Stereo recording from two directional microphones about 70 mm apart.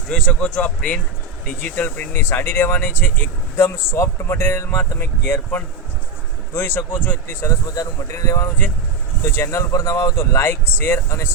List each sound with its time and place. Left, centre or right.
0.1 s speech: centre
1.6 s speech: left
3.6 s speech: left
7.4 s speech: left